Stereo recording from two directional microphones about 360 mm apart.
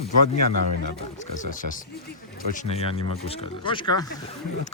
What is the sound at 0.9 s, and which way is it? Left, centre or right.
Speech, centre.